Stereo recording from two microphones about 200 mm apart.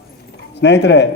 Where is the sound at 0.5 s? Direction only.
60° left (ahead or behind).